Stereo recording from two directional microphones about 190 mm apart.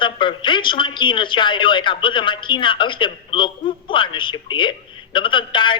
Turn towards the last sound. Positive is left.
turn(degrees=25)  # may be behind; listen again after turning